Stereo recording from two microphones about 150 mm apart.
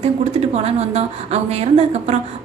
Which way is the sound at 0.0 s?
45° right (ahead or behind).